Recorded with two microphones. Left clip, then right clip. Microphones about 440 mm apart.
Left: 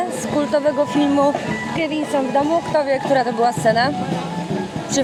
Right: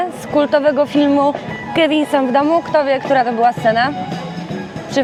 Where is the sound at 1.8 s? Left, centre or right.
Right.